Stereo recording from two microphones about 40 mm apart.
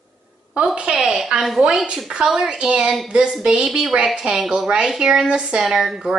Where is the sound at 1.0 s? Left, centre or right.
Centre.